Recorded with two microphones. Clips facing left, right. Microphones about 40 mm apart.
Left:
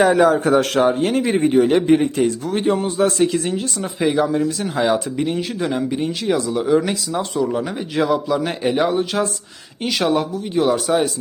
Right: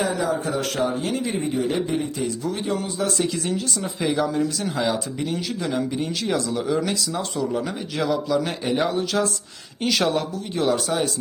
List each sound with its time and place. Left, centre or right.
0.0 s a man's voice: left; by 4.7 s centre
4.7 s speech: left
5.6 s speech: left
9.8 s speech: centre